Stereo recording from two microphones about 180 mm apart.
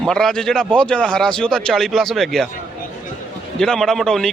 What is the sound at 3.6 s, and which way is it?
Speech, 5° left (ahead or behind).